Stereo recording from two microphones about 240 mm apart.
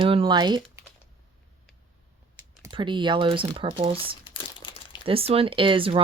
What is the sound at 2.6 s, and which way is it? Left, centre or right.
Speech, centre.